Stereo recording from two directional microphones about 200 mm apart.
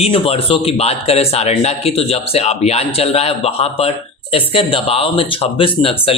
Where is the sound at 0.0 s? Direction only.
30° left (ahead or behind).